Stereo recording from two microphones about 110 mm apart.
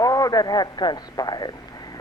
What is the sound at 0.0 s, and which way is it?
A man's voice, 35° left (ahead or behind).